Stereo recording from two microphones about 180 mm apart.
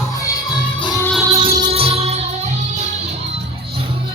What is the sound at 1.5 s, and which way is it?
Music, 30° right (ahead or behind).